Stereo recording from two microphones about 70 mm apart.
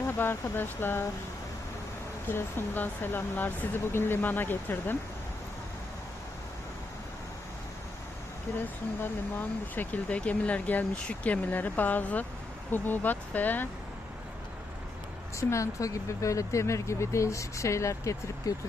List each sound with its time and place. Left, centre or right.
0.2 s speech: left
2.2 s speech: left
8.5 s speech: left
9.7 s speech: left
15.4 s speech: left